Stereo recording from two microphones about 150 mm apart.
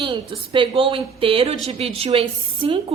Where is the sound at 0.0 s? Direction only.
35° right (ahead or behind).